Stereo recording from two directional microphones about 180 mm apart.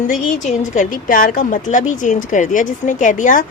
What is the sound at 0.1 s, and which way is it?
A woman's voice, 40° left (ahead or behind).